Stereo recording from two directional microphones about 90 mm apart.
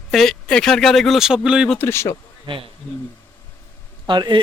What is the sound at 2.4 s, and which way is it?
Speech, 70° right (ahead or behind).